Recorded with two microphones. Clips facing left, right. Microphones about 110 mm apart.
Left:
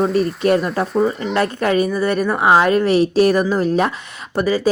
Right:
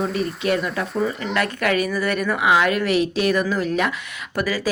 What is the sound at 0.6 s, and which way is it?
A woman's voice, 35° left (ahead or behind).